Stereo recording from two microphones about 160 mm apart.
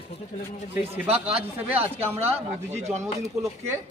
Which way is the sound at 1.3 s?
40° right (ahead or behind).